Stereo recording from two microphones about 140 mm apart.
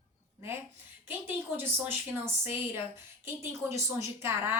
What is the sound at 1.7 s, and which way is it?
A woman's voice, 15° right (ahead or behind).